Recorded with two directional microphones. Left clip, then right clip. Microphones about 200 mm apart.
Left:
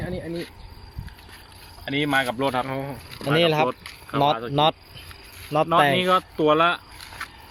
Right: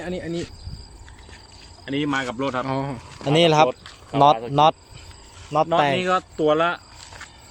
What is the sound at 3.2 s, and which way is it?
Speech, 15° right (ahead or behind).